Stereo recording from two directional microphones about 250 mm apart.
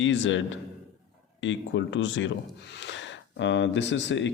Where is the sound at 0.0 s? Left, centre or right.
Left.